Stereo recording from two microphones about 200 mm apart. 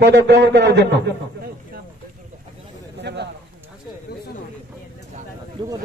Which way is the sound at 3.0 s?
60° right (ahead or behind).